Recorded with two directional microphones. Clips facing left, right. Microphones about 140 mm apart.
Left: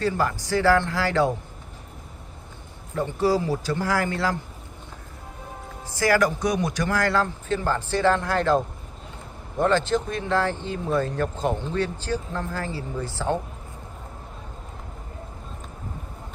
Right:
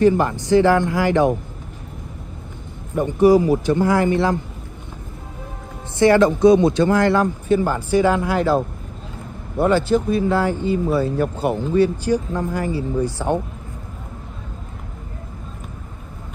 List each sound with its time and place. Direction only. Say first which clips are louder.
0.0 s a man's voice: right 8 dB; 20° right (ahead or behind)
2.9 s a man's voice: right 9 dB; 15° right (ahead or behind)
5.9 s speech: right 7 dB; 25° right (ahead or behind)